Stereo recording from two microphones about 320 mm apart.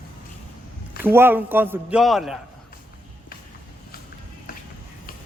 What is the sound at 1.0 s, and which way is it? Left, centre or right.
A man's voice, centre.